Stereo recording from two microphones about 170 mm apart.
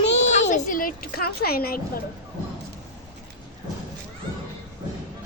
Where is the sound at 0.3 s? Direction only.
50° left (ahead or behind).